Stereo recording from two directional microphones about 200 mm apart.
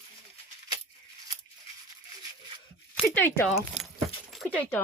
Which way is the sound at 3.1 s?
10° left (ahead or behind).